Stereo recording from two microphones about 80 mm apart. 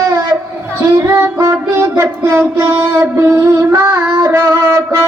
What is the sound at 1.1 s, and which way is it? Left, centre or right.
Music, right.